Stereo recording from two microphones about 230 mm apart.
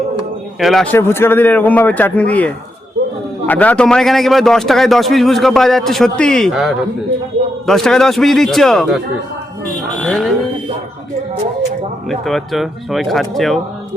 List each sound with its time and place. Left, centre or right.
0.6 s speech: centre
3.0 s a sound: right
3.4 s a man's voice: centre
10.0 s music: centre
12.0 s a man's voice: centre